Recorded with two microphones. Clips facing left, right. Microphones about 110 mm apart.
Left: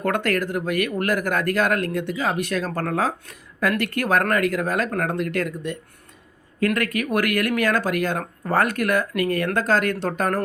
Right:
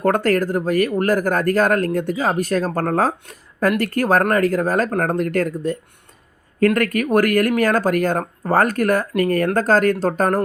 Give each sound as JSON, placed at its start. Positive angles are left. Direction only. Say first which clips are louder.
{"t": 0.0, "sound": "speech", "louder": "right 5 dB", "side_deg": -35}
{"t": 6.7, "sound": "speech", "louder": "right 6 dB", "side_deg": -45}